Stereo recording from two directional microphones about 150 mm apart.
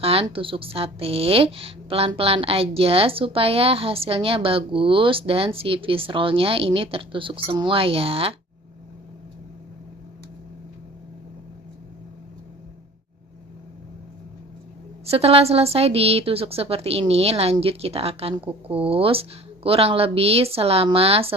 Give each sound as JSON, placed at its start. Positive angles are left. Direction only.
{"t": 0.0, "sound": "a woman's voice", "side_deg": -40}
{"t": 15.0, "sound": "a woman's voice", "side_deg": -40}